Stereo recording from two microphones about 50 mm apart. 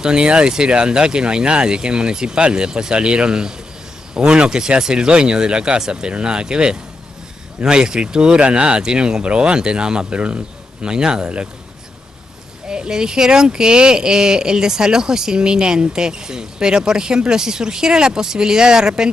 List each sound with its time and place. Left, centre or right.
0.0 s speech: centre
12.6 s speech: centre